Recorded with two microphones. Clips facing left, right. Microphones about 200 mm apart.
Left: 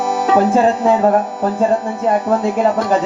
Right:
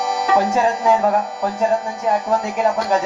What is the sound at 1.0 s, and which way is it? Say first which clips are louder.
Speech: left 4 dB; 55° left (ahead or behind).